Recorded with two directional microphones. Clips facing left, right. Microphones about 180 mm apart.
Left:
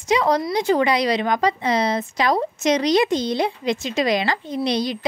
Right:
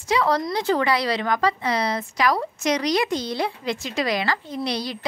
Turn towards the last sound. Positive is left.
turn(degrees=20)  # may be behind; listen again after turning